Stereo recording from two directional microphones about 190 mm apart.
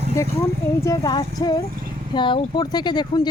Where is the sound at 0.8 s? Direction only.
20° left (ahead or behind).